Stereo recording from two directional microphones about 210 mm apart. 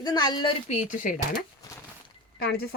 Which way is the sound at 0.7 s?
35° left (ahead or behind).